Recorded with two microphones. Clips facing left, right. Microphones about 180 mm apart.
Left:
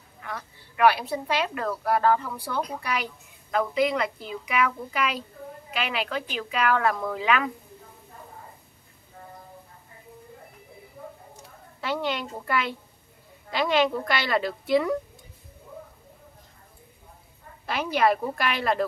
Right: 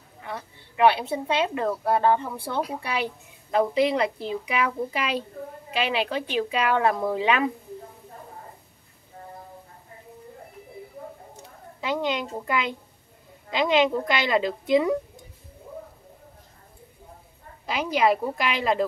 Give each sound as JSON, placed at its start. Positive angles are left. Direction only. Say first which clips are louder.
{"t": 0.2, "sound": "a woman's voice", "louder": "right 2 dB", "side_deg": -25}
{"t": 11.8, "sound": "a woman's voice", "louder": "right 2 dB", "side_deg": -15}
{"t": 17.6, "sound": "a woman's voice", "louder": "right 1 dB", "side_deg": -15}